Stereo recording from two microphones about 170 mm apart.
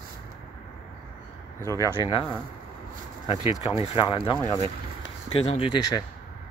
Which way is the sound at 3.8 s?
30° left (ahead or behind).